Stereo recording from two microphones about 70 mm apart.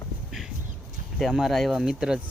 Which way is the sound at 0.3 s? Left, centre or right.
Centre.